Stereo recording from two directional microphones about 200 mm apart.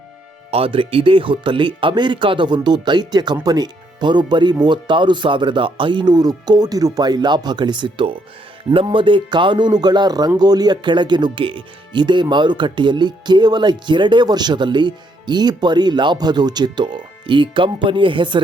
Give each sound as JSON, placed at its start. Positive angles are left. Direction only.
{"t": 0.5, "sound": "speech", "side_deg": -25}